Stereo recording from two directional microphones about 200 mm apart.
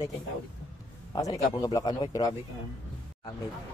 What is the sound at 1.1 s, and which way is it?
Speech, 15° left (ahead or behind).